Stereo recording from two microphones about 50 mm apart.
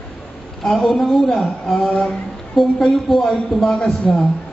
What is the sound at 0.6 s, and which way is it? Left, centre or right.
Speech, centre.